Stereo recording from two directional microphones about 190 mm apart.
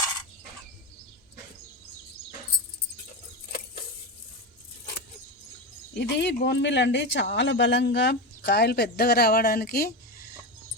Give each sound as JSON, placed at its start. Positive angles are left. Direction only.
{"t": 6.0, "sound": "speech", "side_deg": 65}